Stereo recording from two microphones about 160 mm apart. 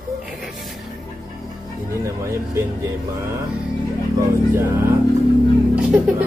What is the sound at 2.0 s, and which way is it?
Speech, 20° right (ahead or behind).